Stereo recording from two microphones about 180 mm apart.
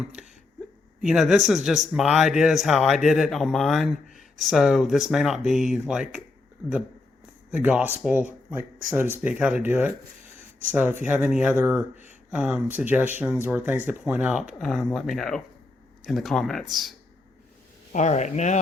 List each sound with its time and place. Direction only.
0.2 s a sound: centre (ahead or behind)
1.0 s speech: 5° right (ahead or behind)
7.5 s speech: 10° right (ahead or behind)
17.9 s speech: 40° left (ahead or behind)